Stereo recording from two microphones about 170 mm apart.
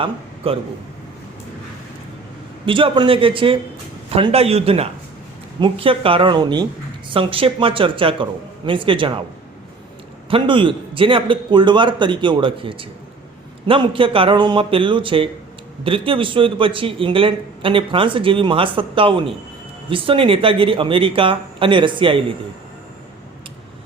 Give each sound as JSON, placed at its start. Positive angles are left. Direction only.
{"t": 0.4, "sound": "a man's voice", "side_deg": -35}
{"t": 2.6, "sound": "a man's voice", "side_deg": -30}
{"t": 10.2, "sound": "a man's voice", "side_deg": -30}